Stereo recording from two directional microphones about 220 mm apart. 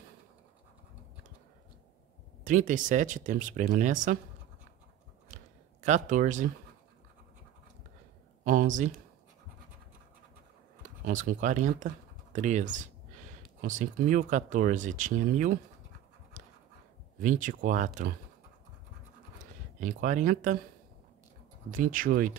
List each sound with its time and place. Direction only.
2.4 s speech: 35° right (ahead or behind)
5.3 s a sound: 35° right (ahead or behind)
8.5 s speech: 35° right (ahead or behind)
10.8 s speech: 35° right (ahead or behind)
17.2 s speech: 35° right (ahead or behind)
19.8 s speech: 35° right (ahead or behind)
21.6 s speech: 40° right (ahead or behind)